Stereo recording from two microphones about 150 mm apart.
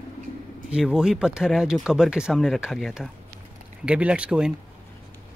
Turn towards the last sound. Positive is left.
turn(degrees=-5)  # may be behind; listen again after turning